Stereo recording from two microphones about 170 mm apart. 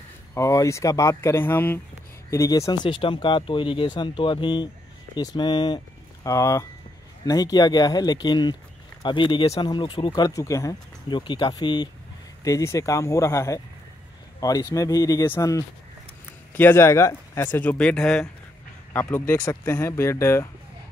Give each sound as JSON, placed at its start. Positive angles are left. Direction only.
{"t": 0.3, "sound": "speech", "side_deg": 15}